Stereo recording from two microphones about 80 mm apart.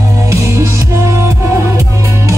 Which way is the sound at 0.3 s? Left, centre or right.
Right.